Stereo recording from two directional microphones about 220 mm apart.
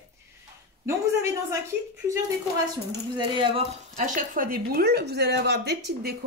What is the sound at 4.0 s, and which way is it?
A woman's voice, 35° right (ahead or behind).